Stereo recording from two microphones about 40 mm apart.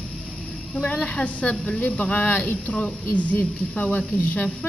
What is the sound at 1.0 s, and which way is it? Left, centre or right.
A woman's voice, left.